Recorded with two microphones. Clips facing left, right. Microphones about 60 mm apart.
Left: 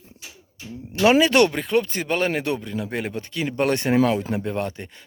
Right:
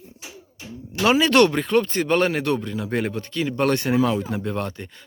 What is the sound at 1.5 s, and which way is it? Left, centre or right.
Speech, centre.